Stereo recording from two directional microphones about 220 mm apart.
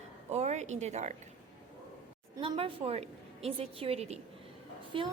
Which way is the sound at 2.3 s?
25° right (ahead or behind).